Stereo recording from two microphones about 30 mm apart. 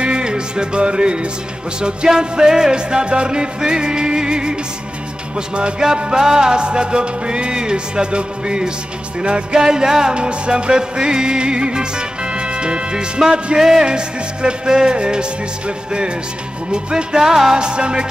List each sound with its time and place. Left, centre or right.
0.0 s music: right
5.6 s music: right
10.1 s music: right
16.7 s music: right
17.6 s music: right